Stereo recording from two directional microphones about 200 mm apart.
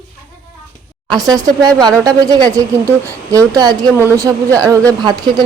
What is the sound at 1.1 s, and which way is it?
Speech, 20° right (ahead or behind).